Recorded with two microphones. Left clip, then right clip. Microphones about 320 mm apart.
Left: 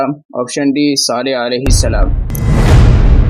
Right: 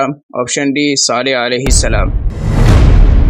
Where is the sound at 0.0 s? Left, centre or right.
Left.